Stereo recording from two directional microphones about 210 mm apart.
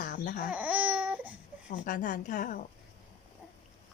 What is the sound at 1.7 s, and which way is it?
Speech, 40° left (ahead or behind).